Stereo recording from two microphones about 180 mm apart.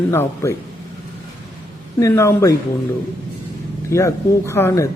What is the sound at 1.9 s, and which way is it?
Speech, 15° left (ahead or behind).